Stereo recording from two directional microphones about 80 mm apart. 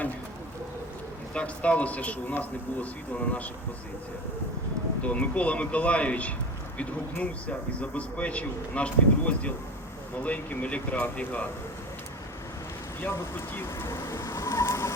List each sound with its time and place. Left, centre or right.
1.3 s speech: centre
5.0 s speech: centre
13.0 s vehicle: left